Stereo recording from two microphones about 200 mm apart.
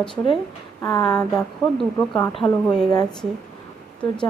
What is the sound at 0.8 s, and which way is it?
Speech, 15° left (ahead or behind).